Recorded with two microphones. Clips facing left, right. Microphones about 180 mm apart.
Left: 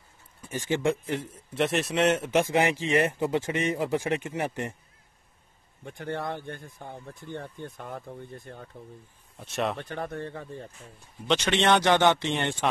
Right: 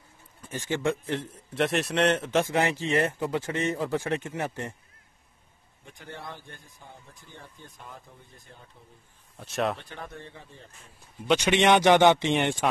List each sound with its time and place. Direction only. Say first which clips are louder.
0.4 s a man's voice: left 2 dB; 15° left (ahead or behind)
5.9 s speech: left 9 dB; 60° left (ahead or behind)
9.4 s speech: right 1 dB; centre (ahead or behind)
9.8 s speech: left 8 dB; 55° left (ahead or behind)
11.2 s speech: right 2 dB; 10° right (ahead or behind)